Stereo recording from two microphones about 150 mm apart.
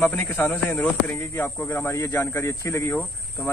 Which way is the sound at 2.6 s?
20° left (ahead or behind).